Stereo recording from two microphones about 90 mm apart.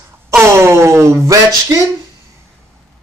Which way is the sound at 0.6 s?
30° right (ahead or behind).